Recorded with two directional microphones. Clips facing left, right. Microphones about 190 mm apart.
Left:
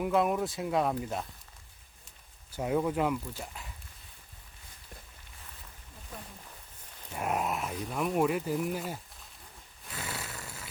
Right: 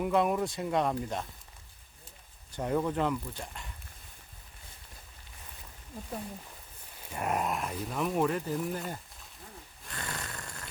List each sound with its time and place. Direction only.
0.0 s speech: centre (ahead or behind)
2.5 s speech: 5° left (ahead or behind)
7.1 s speech: centre (ahead or behind)
9.9 s a sound: 5° left (ahead or behind)